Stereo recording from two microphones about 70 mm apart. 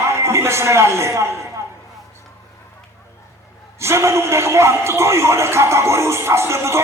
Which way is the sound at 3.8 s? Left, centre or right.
Right.